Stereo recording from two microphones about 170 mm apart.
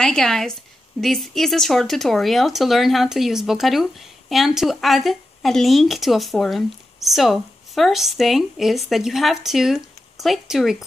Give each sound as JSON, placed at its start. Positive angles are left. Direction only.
{"t": 0.0, "sound": "speech", "side_deg": 5}